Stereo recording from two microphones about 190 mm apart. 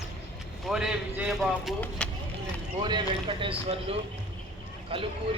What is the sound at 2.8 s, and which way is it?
Speech, 25° right (ahead or behind).